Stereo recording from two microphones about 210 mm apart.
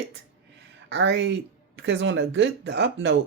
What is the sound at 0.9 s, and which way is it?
Speech, 55° right (ahead or behind).